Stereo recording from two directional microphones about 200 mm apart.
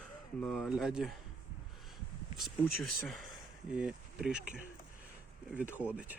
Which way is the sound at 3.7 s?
5° right (ahead or behind).